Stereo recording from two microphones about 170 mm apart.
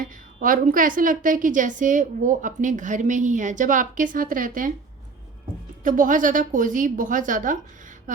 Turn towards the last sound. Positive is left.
turn(degrees=-50)  # may be behind; listen again after turning